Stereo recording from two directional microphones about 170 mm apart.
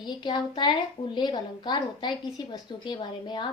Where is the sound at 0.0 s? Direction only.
25° left (ahead or behind).